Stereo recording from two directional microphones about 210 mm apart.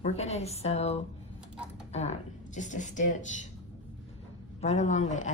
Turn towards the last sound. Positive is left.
turn(degrees=35)  # may be behind; listen again after turning